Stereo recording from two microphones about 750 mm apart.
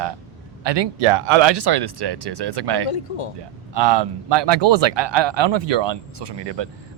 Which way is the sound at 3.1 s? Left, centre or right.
Left.